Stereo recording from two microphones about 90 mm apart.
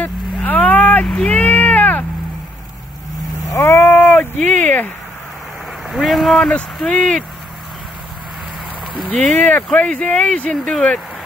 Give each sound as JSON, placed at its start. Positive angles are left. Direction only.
{"t": 0.0, "sound": "a sound", "side_deg": 15}
{"t": 1.0, "sound": "vehicle", "side_deg": 15}
{"t": 3.4, "sound": "a sound", "side_deg": 30}
{"t": 5.9, "sound": "vehicle", "side_deg": 0}
{"t": 6.3, "sound": "speech", "side_deg": 10}
{"t": 8.9, "sound": "speech", "side_deg": 10}